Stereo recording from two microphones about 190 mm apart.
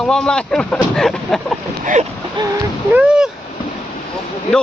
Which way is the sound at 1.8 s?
40° right (ahead or behind).